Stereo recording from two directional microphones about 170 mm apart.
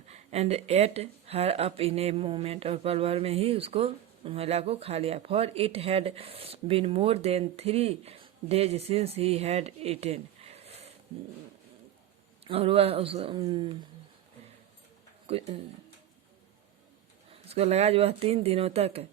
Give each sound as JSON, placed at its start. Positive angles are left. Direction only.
{"t": 0.1, "sound": "speech", "side_deg": -40}
{"t": 12.5, "sound": "speech", "side_deg": -35}
{"t": 15.3, "sound": "speech", "side_deg": -35}
{"t": 17.5, "sound": "speech", "side_deg": -40}